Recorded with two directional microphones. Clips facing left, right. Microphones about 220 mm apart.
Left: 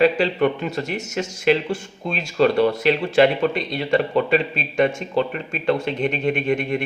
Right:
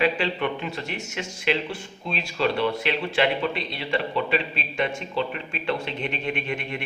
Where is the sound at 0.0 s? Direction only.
40° left (ahead or behind).